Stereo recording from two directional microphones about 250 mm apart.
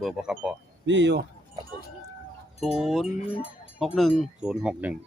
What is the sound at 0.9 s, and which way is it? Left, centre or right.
Speech, right.